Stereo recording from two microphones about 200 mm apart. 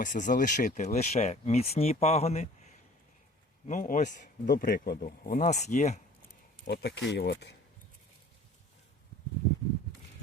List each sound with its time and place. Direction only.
0.0 s speech: 40° left (ahead or behind)
3.7 s speech: 40° left (ahead or behind)
6.7 s speech: 60° left (ahead or behind)